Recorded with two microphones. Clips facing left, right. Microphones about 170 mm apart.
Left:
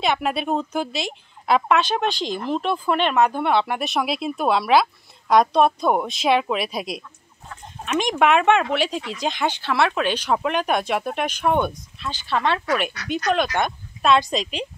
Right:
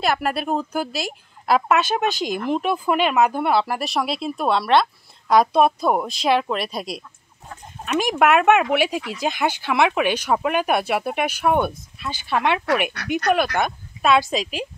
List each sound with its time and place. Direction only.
0.0 s a woman's voice: centre (ahead or behind)
13.0 s speech: 60° right (ahead or behind)
13.3 s a woman's voice: 5° right (ahead or behind)